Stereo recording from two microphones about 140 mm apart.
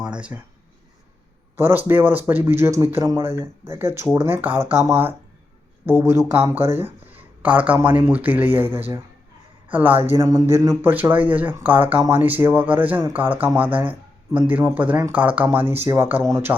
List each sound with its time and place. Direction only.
0.0 s speech: 10° right (ahead or behind)
1.5 s speech: 15° right (ahead or behind)
10.1 s speech: 20° right (ahead or behind)